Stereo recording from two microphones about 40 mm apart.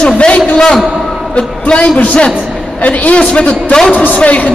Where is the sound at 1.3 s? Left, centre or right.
Left.